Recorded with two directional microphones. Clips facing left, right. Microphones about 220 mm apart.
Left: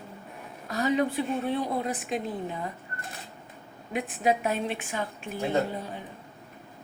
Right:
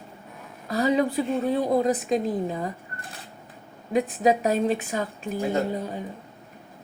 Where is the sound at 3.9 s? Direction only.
40° right (ahead or behind).